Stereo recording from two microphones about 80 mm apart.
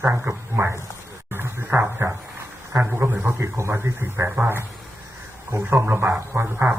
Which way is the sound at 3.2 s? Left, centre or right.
Right.